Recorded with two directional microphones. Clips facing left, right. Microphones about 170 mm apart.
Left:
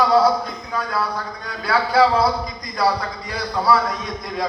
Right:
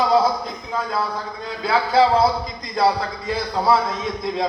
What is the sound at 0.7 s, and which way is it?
A man's voice, 25° right (ahead or behind).